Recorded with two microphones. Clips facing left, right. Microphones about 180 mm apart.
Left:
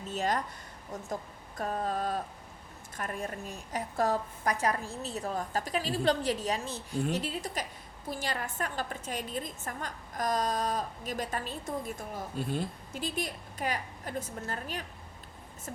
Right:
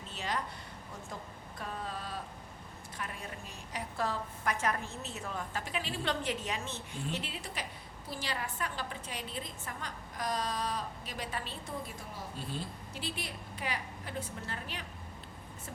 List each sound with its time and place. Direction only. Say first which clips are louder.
0.1 s a woman's voice: left 6 dB; 45° left (ahead or behind)